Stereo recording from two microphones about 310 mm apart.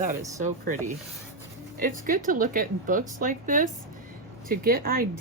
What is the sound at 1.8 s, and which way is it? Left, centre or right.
Speech, right.